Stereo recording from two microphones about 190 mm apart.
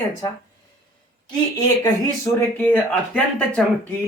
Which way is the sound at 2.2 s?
10° left (ahead or behind).